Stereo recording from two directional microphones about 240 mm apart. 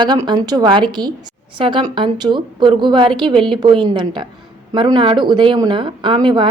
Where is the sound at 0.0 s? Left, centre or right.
Centre.